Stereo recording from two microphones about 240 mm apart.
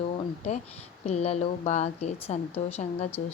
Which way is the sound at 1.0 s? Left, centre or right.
Left.